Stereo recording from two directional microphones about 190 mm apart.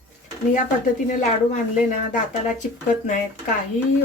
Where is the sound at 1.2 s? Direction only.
40° left (ahead or behind).